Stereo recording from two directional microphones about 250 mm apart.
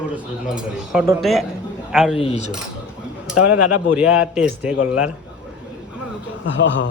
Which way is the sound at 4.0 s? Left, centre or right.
Centre.